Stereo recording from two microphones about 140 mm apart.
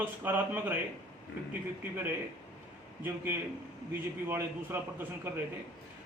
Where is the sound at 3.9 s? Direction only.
15° right (ahead or behind).